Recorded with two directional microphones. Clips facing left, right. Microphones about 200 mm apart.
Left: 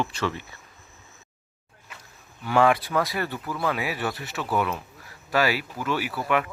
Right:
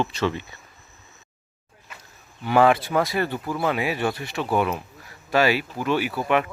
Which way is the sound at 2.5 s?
30° right (ahead or behind).